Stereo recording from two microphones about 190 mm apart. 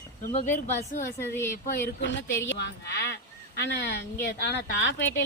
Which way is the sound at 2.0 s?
70° left (ahead or behind).